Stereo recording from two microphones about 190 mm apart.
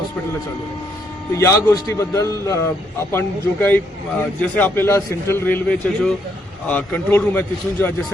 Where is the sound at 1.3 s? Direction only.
15° left (ahead or behind).